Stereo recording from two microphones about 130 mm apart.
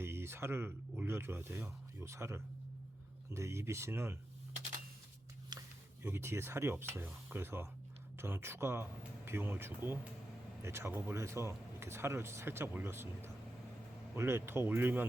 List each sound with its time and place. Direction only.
0.0 s speech: 20° right (ahead or behind)
5.5 s speech: 20° right (ahead or behind)